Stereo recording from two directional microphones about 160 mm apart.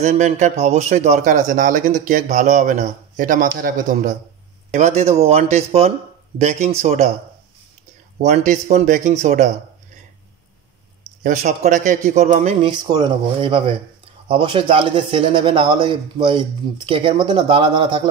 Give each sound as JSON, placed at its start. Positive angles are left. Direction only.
{"t": 0.0, "sound": "a man's voice", "side_deg": -45}
{"t": 4.7, "sound": "a man's voice", "side_deg": -45}
{"t": 8.2, "sound": "a man's voice", "side_deg": -50}
{"t": 11.2, "sound": "a man's voice", "side_deg": -50}
{"t": 12.6, "sound": "speech", "side_deg": -25}